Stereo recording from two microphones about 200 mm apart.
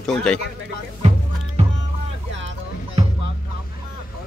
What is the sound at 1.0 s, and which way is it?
Music, 35° right (ahead or behind).